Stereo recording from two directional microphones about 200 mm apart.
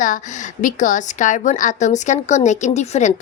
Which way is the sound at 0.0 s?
40° left (ahead or behind).